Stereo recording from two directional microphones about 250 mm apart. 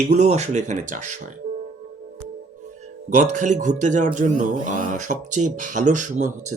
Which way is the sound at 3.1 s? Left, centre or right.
Right.